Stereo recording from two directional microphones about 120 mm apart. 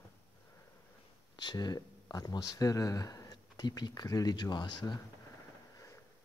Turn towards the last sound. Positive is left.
turn(degrees=35)  # may be behind; listen again after turning